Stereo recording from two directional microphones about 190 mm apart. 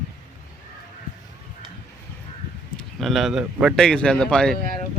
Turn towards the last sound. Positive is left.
turn(degrees=5)  # may be behind; listen again after turning